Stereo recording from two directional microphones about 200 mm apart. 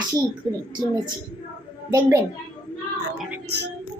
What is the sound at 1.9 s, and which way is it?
Speech, 15° right (ahead or behind).